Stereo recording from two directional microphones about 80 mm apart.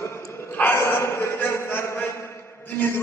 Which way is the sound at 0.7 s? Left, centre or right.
Left.